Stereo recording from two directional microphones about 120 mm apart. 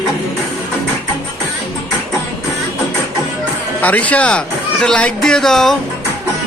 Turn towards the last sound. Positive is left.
turn(degrees=5)  # may be behind; listen again after turning